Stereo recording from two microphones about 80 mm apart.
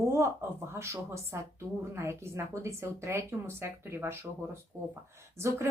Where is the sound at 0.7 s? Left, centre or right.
Right.